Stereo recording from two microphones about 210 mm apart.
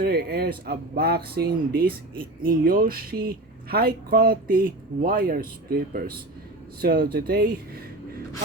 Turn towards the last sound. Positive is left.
turn(degrees=-45)  # may be behind; listen again after turning